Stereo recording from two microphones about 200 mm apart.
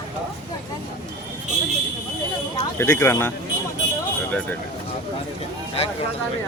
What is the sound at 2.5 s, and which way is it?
Speech, 15° left (ahead or behind).